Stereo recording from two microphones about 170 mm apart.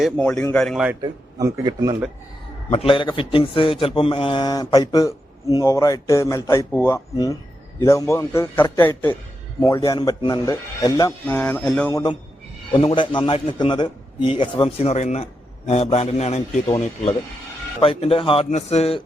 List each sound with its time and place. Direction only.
0.0 s a man's voice: 5° left (ahead or behind)
1.0 s speech: 20° right (ahead or behind)
2.7 s a man's voice: 30° left (ahead or behind); by 9.8 s 15° left (ahead or behind)
9.8 s a man's voice: 25° left (ahead or behind)
11.3 s a man's voice: 10° left (ahead or behind)
11.9 s a man's voice: 25° left (ahead or behind)